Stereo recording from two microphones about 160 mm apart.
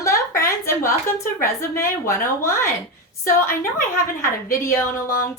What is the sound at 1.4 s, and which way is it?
A woman's voice, 15° left (ahead or behind).